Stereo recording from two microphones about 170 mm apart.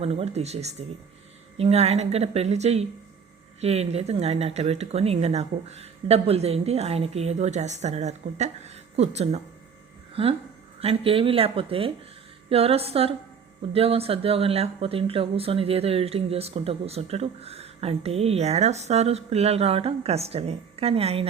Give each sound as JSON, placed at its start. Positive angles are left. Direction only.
{"t": 0.0, "sound": "speech", "side_deg": -35}
{"t": 10.8, "sound": "speech", "side_deg": -35}